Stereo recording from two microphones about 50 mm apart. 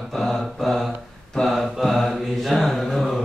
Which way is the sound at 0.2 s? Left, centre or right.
Centre.